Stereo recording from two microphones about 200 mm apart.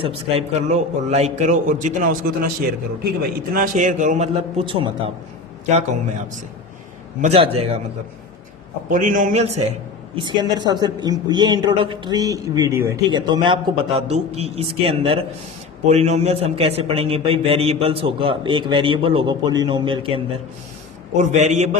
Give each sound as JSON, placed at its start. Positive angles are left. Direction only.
{"t": 0.0, "sound": "a man's voice", "side_deg": -30}
{"t": 7.2, "sound": "speech", "side_deg": -30}
{"t": 8.9, "sound": "a man's voice", "side_deg": -40}
{"t": 10.2, "sound": "a man's voice", "side_deg": -20}